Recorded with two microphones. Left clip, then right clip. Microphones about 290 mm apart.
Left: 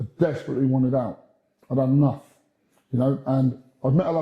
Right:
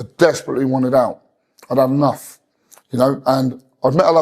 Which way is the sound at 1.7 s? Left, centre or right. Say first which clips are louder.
Right 8 dB; centre.